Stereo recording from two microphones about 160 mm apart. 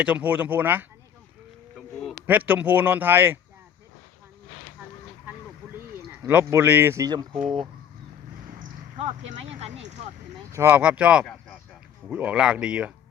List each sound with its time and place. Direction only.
0.0 s speech: 10° right (ahead or behind)
2.2 s speech: 10° right (ahead or behind)
5.7 s speech: 15° right (ahead or behind)
7.3 s speech: 5° right (ahead or behind)
9.0 s speech: 45° right (ahead or behind)
10.5 s speech: 15° right (ahead or behind)